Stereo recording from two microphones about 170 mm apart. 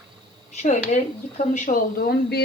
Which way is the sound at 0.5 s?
40° left (ahead or behind).